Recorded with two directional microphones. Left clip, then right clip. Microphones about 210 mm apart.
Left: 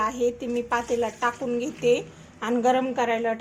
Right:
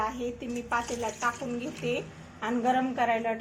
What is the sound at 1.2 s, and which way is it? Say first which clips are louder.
A woman's voice: left 5 dB; 50° left (ahead or behind).